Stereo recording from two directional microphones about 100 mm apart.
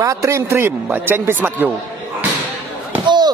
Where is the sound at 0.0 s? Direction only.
35° right (ahead or behind).